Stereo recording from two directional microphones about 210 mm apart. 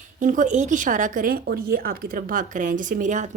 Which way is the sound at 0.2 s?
35° right (ahead or behind).